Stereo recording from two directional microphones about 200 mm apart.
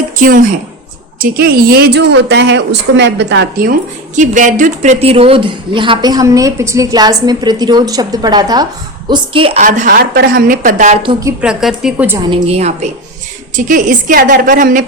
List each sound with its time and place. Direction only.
0.2 s a woman's voice: 45° right (ahead or behind); by 3.7 s 60° right (ahead or behind)
3.7 s speech: 40° right (ahead or behind)
9.6 s a woman's voice: 45° right (ahead or behind)
11.0 s speech: 20° right (ahead or behind)
11.3 s a woman's voice: 5° right (ahead or behind)
12.3 s a woman's voice: 30° right (ahead or behind)